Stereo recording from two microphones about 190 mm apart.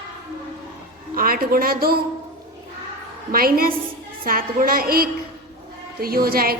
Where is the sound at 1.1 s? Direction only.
50° right (ahead or behind).